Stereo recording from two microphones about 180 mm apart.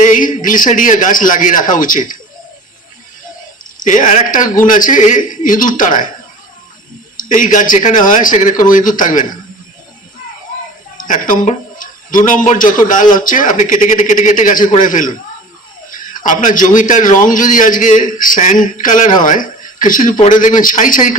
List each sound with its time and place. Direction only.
0.0 s a man's voice: 45° left (ahead or behind)
3.8 s a man's voice: 45° left (ahead or behind)
7.2 s a man's voice: 45° left (ahead or behind)
10.9 s a man's voice: 45° left (ahead or behind)